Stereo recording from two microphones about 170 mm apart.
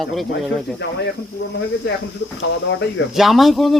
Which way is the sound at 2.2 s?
90° left.